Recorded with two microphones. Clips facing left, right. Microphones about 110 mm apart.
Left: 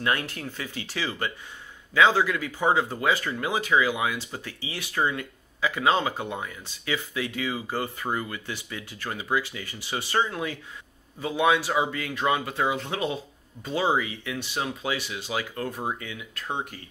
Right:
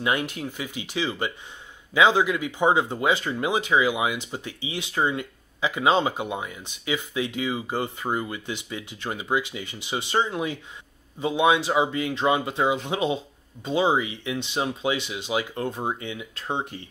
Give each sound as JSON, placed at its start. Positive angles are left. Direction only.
{"t": 0.0, "sound": "speech", "side_deg": -15}